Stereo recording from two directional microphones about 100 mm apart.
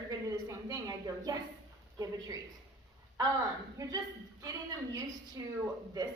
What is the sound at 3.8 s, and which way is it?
Speech, 40° right (ahead or behind).